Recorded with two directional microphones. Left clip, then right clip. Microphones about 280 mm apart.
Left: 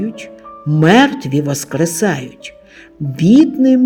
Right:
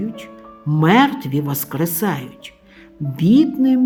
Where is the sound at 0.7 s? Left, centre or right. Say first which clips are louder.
Left 4 dB; centre.